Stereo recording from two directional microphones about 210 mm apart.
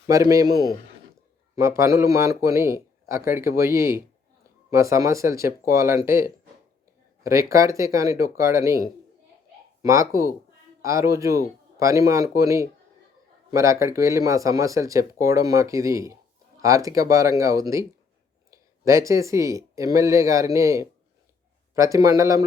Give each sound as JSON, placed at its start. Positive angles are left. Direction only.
{"t": 0.1, "sound": "speech", "side_deg": -15}